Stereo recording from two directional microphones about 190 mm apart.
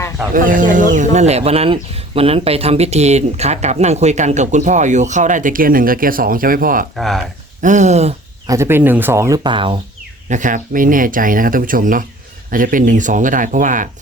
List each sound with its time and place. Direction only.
0.3 s speech: 45° right (ahead or behind)
6.9 s speech: centre (ahead or behind)
7.6 s speech: 40° right (ahead or behind)
8.4 s speech: 15° right (ahead or behind)
10.2 s speech: 40° right (ahead or behind)